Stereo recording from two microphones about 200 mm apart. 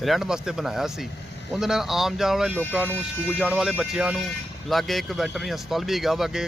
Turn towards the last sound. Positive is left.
turn(degrees=0)  # may be behind; listen again after turning